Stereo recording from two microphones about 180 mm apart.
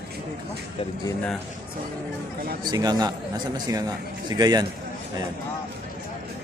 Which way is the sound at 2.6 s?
20° right (ahead or behind).